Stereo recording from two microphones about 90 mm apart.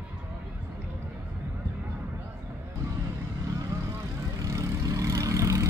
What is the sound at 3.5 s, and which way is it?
Vehicle, 40° right (ahead or behind).